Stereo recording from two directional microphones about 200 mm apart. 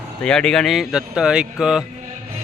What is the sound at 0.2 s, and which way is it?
Speech, 5° left (ahead or behind).